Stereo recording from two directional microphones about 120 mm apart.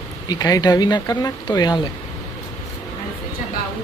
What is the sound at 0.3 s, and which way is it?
Speech, 35° left (ahead or behind).